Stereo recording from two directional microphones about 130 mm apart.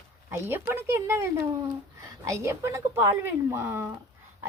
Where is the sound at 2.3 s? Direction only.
20° right (ahead or behind).